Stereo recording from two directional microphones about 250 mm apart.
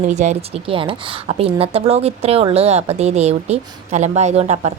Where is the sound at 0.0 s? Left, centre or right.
Right.